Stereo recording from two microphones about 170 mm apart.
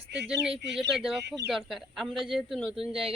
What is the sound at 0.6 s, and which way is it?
Speech, 90° right.